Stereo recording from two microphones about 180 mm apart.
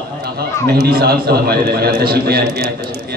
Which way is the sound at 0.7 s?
60° right (ahead or behind).